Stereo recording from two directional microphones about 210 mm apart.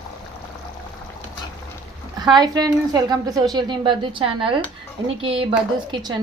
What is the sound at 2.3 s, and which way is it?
A woman's voice, 20° right (ahead or behind).